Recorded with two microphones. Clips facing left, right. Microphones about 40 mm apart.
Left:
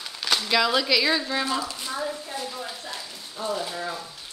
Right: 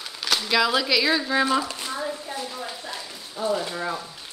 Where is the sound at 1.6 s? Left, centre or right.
Right.